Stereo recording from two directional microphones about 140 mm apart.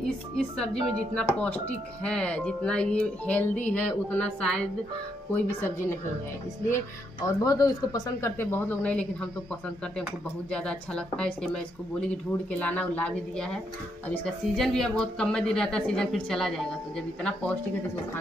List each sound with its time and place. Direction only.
0.4 s speech: 5° left (ahead or behind)
7.2 s speech: 25° left (ahead or behind); by 9.3 s 10° left (ahead or behind)
10.5 s speech: 5° left (ahead or behind)